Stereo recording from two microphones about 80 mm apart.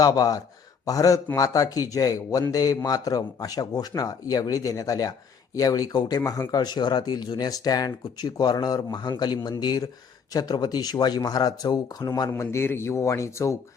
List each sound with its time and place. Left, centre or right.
0.0 s speech: left
12.4 s speech: left